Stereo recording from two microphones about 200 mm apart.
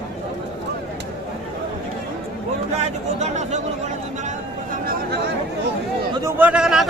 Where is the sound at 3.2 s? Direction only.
35° right (ahead or behind).